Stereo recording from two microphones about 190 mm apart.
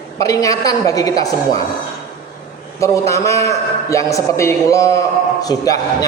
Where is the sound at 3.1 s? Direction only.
15° left (ahead or behind).